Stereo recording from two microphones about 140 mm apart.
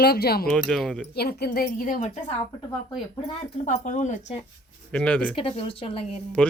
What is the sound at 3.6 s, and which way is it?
Speech, 60° left (ahead or behind).